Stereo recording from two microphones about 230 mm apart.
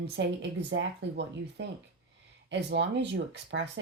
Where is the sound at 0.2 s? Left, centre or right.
Right.